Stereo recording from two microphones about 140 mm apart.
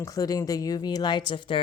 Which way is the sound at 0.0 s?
25° left (ahead or behind).